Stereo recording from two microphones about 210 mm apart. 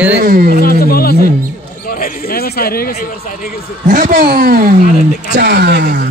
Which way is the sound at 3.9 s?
40° right (ahead or behind).